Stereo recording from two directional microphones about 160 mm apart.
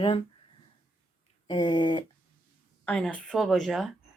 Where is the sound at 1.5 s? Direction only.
30° left (ahead or behind).